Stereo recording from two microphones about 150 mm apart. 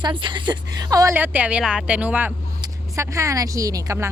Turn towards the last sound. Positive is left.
turn(degrees=-20)  # may be behind; listen again after turning